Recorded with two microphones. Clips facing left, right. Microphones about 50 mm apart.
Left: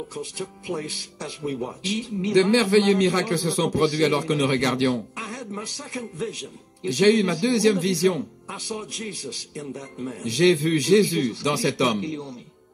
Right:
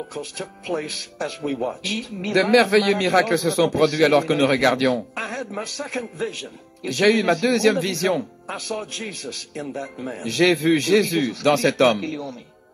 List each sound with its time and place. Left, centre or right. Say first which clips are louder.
0.1 s speech: right 1 dB; right
5.1 s music: right 5 dB; right
5.8 s speech: right 5 dB; right
10.3 s speech: right 2 dB; right